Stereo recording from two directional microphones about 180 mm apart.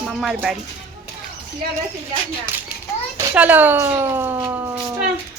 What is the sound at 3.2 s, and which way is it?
Speech, 10° right (ahead or behind).